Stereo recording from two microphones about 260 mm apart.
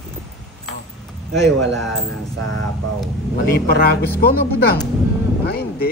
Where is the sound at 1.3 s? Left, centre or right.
Centre.